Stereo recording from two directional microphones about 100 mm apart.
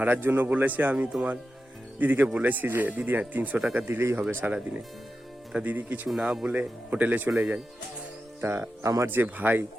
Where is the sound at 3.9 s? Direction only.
20° right (ahead or behind).